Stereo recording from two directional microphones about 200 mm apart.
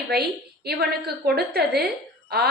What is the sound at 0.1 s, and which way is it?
A woman's voice, 55° right (ahead or behind).